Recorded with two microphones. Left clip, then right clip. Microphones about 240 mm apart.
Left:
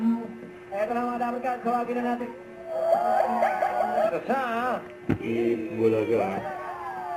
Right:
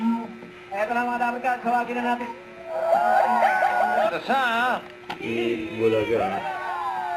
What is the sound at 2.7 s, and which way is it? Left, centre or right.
Music, right.